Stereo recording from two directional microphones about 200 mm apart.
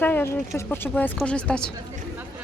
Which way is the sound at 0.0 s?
10° left (ahead or behind).